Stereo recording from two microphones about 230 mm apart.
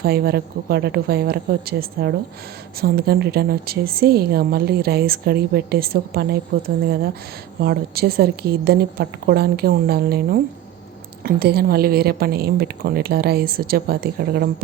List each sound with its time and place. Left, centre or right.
0.0 s a woman's voice: right